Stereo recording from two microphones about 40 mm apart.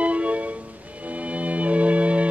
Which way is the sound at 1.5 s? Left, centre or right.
Right.